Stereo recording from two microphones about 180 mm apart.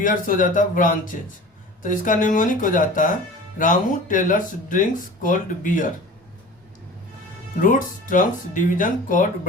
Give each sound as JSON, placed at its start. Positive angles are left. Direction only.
{"t": 0.0, "sound": "speech", "side_deg": 50}
{"t": 7.6, "sound": "speech", "side_deg": 45}